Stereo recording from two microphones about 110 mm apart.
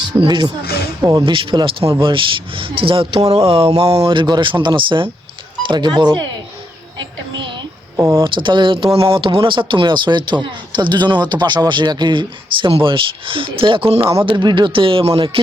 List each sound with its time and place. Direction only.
0.2 s speech: 45° right (ahead or behind)
3.2 s a sound: 60° right (ahead or behind)
3.8 s speech: 60° right (ahead or behind); by 6.2 s 45° right (ahead or behind)
7.9 s speech: 20° right (ahead or behind)
8.2 s speech: 45° right (ahead or behind)